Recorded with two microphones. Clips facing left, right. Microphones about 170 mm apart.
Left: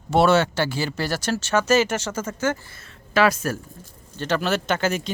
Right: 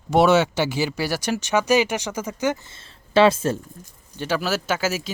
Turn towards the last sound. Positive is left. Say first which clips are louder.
# left 1 dB
turn(degrees=-5)  # may be behind; listen again after turning